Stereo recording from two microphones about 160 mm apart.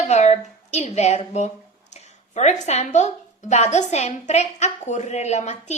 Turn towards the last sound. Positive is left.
turn(degrees=45)  # may be behind; listen again after turning